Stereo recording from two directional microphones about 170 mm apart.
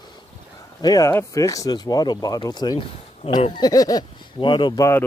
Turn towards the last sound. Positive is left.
turn(degrees=15)  # may be behind; listen again after turning